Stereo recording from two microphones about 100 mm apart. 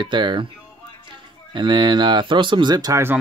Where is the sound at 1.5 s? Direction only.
50° right (ahead or behind).